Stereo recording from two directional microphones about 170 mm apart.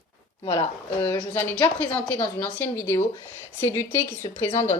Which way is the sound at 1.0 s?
15° left (ahead or behind).